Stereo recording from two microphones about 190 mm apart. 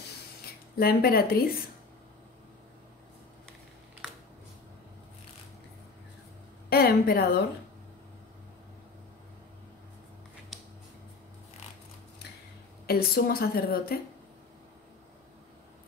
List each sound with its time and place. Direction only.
0.7 s a woman's voice: 50° left (ahead or behind)
6.7 s a woman's voice: 55° left (ahead or behind)
10.5 s a sound: centre (ahead or behind)
12.8 s a woman's voice: 55° left (ahead or behind)